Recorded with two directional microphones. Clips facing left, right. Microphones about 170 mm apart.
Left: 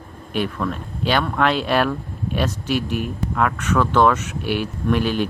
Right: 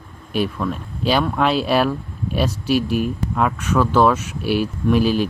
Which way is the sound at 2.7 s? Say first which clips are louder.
Right 5 dB; 30° right (ahead or behind).